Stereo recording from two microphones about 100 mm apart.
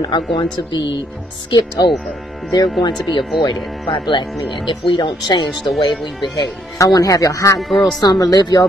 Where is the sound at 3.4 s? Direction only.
50° left (ahead or behind).